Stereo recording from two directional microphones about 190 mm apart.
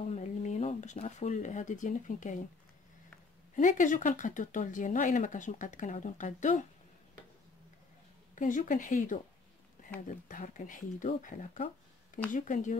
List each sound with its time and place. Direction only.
0.1 s speech: 40° left (ahead or behind)
3.5 s speech: 45° left (ahead or behind)
8.4 s speech: 45° left (ahead or behind)